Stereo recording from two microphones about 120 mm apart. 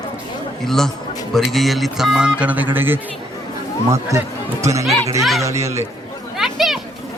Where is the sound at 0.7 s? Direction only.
5° left (ahead or behind); by 4.8 s 25° right (ahead or behind).